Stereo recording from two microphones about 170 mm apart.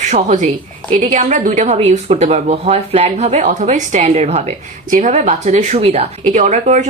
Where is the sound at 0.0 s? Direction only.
45° right (ahead or behind).